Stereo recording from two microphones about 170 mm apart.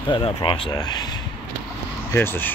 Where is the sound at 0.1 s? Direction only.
30° left (ahead or behind).